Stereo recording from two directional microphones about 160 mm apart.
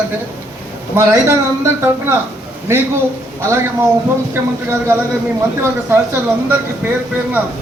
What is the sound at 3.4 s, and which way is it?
Speech, 20° right (ahead or behind).